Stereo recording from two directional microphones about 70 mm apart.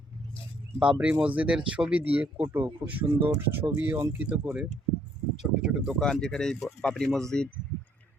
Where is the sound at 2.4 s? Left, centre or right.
Right.